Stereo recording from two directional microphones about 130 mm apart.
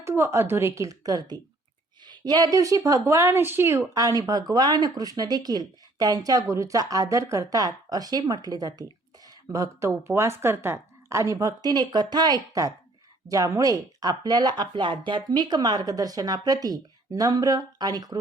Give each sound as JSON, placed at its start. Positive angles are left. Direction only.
{"t": 0.0, "sound": "speech", "side_deg": -20}